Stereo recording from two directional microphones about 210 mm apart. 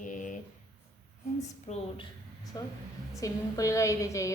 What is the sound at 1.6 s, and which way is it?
Speech, 30° left (ahead or behind).